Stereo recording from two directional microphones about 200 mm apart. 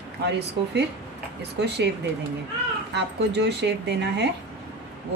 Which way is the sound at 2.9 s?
60° right (ahead or behind).